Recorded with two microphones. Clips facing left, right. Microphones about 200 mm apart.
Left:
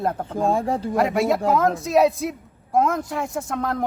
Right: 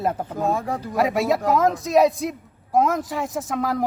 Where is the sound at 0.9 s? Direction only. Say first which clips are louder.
Right 1 dB; centre (ahead or behind).